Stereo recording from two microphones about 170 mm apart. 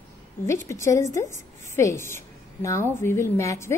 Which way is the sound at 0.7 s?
15° left (ahead or behind).